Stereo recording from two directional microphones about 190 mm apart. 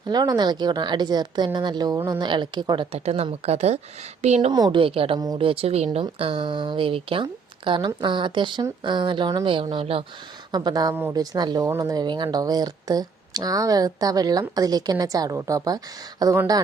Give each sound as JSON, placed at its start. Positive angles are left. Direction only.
{"t": 0.1, "sound": "a woman's voice", "side_deg": -20}
{"t": 4.5, "sound": "a woman's voice", "side_deg": -25}